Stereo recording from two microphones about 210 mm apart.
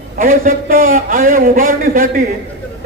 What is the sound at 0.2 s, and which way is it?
A man's voice, 40° right (ahead or behind).